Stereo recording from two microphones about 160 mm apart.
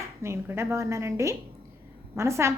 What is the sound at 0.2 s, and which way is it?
A woman's voice, 15° right (ahead or behind).